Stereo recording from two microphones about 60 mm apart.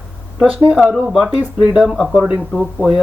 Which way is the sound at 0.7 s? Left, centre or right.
Centre.